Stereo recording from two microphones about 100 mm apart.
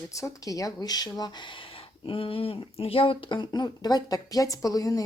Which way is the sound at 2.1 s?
65° left (ahead or behind).